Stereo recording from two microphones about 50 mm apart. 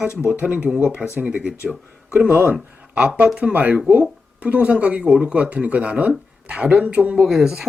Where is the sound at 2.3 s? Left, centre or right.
Right.